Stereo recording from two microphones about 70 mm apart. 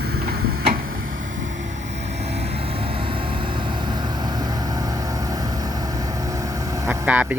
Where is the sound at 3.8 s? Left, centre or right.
Right.